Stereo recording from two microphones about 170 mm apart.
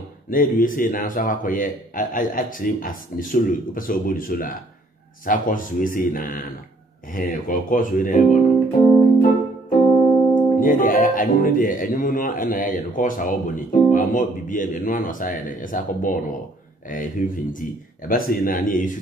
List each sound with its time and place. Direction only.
0.3 s speech: 55° left (ahead or behind)
9.7 s speech: 50° left (ahead or behind)